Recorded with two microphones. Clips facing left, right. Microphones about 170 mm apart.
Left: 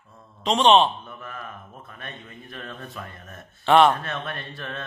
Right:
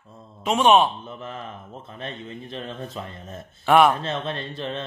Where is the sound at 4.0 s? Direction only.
25° right (ahead or behind).